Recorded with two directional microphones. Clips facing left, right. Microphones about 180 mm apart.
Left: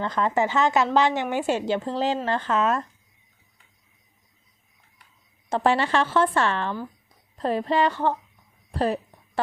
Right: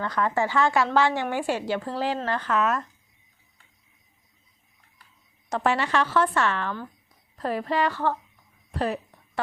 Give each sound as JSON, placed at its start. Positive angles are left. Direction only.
{"t": 0.0, "sound": "speech", "side_deg": 20}
{"t": 5.5, "sound": "speech", "side_deg": 30}
{"t": 8.7, "sound": "a sound", "side_deg": 30}